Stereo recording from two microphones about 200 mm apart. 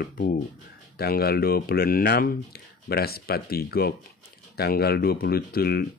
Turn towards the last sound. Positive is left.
turn(degrees=50)  # may be behind; listen again after turning